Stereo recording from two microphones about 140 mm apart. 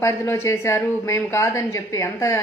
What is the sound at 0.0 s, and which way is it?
A woman's voice, 20° left (ahead or behind).